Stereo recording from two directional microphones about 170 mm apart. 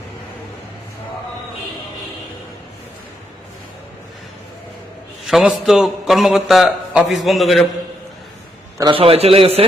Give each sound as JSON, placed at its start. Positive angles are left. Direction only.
{"t": 5.2, "sound": "a man's voice", "side_deg": 0}
{"t": 8.8, "sound": "a man's voice", "side_deg": -30}